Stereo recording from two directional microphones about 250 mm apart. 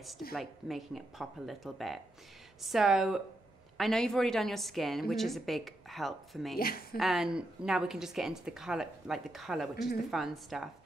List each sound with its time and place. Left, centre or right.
0.3 s a woman's voice: centre
6.6 s a woman's voice: left
7.0 s a woman's voice: centre